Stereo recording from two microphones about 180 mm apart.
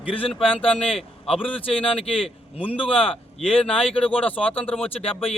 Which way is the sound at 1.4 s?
30° left (ahead or behind).